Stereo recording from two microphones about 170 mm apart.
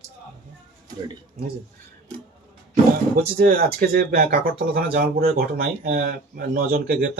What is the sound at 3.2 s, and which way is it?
Speech, 60° right (ahead or behind).